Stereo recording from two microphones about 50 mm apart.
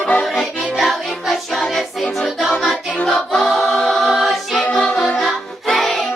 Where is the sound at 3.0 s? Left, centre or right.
Centre.